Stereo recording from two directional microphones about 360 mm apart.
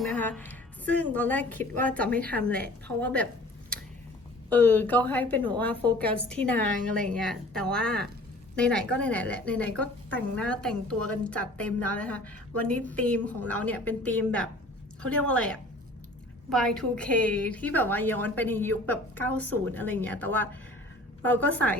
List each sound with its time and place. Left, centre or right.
0.0 s a woman's voice: centre
4.4 s a woman's voice: centre